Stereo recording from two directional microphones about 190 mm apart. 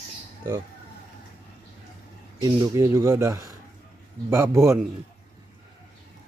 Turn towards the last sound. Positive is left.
turn(degrees=-15)  # may be behind; listen again after turning